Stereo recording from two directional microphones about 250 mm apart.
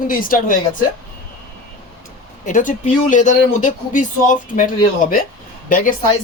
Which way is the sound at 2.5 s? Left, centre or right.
Left.